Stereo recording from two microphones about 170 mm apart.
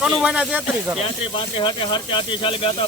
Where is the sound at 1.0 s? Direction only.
30° left (ahead or behind).